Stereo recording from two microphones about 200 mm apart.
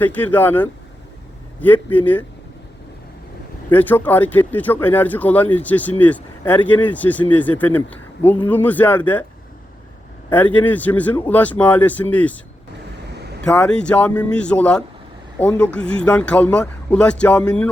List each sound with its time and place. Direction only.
0.0 s speech: 10° left (ahead or behind)
3.7 s speech: 10° left (ahead or behind)
10.3 s speech: 10° left (ahead or behind)
13.4 s speech: 5° left (ahead or behind)